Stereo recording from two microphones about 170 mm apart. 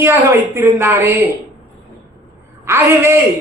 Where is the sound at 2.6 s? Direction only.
15° right (ahead or behind).